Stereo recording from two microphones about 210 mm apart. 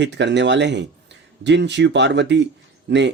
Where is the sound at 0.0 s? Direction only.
55° right (ahead or behind).